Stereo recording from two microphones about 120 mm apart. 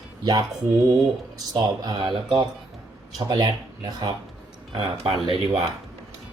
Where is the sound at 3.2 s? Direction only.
35° right (ahead or behind).